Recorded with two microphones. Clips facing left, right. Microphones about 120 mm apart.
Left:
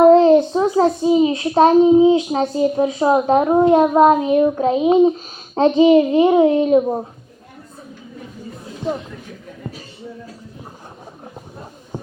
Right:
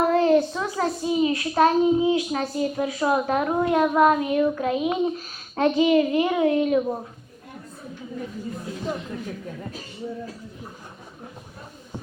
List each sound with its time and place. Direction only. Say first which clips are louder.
0.1 s a child's voice: left 8 dB; 25° left (ahead or behind)